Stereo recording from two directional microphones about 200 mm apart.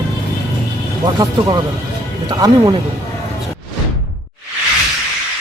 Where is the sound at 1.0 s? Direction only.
20° right (ahead or behind).